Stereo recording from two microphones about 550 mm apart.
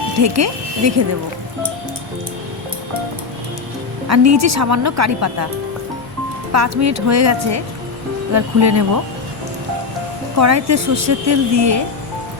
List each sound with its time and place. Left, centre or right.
0.2 s speech: right
4.1 s speech: right
6.5 s speech: right
10.3 s speech: right